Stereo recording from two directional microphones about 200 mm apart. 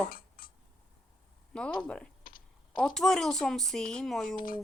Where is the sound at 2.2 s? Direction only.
45° left (ahead or behind).